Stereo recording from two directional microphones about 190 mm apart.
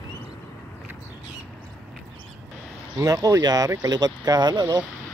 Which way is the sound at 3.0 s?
20° right (ahead or behind).